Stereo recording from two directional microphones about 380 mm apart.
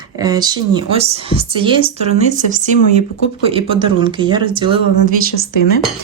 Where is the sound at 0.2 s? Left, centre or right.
Centre.